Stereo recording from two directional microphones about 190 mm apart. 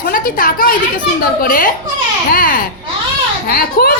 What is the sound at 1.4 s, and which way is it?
Speech, 50° left (ahead or behind).